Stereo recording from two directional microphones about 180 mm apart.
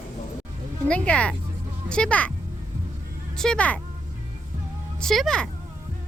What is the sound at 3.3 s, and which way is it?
Speech, 5° left (ahead or behind).